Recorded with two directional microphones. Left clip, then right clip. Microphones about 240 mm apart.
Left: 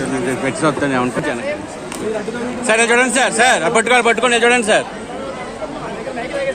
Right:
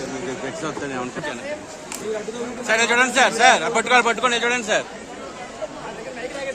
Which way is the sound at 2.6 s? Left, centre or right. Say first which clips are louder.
Left 4 dB; left.